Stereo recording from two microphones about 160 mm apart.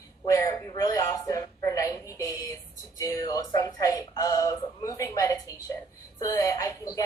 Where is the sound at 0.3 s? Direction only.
20° left (ahead or behind).